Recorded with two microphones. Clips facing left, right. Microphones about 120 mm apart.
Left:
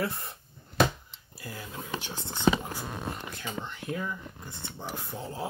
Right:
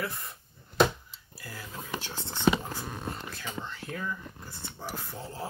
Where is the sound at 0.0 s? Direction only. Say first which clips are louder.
Left 4 dB; 30° left (ahead or behind).